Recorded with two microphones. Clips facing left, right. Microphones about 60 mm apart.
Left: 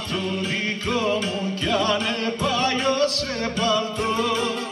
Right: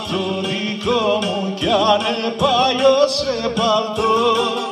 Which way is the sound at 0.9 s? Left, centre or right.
Right.